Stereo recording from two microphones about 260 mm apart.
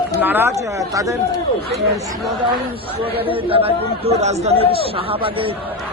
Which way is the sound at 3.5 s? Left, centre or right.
Right.